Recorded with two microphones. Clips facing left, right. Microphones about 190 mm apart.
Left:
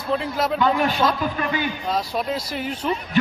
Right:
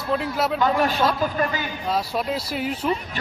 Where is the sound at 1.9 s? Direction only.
5° right (ahead or behind).